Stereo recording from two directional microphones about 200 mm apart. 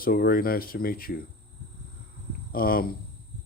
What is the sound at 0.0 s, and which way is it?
Speech, 45° left (ahead or behind).